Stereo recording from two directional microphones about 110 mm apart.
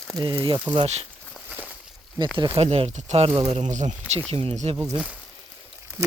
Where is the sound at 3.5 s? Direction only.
90° right.